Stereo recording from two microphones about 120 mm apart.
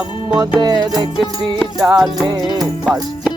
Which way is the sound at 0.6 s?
35° right (ahead or behind).